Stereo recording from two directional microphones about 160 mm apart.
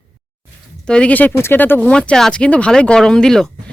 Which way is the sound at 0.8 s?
5° left (ahead or behind).